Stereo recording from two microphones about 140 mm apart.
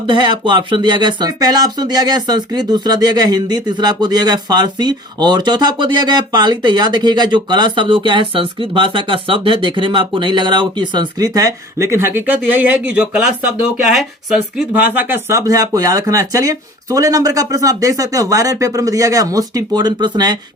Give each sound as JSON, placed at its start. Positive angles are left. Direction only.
{"t": 0.1, "sound": "speech", "side_deg": -35}